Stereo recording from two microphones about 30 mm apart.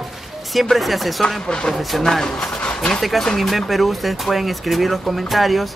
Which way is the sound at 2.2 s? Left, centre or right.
Left.